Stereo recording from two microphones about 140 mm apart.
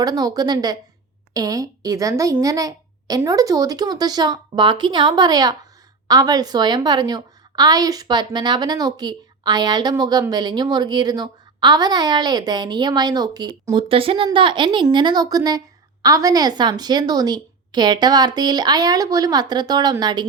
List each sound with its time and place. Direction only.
0.0 s a child's voice: 25° right (ahead or behind)